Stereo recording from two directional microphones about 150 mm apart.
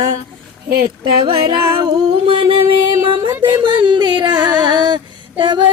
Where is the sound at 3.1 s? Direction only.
30° right (ahead or behind).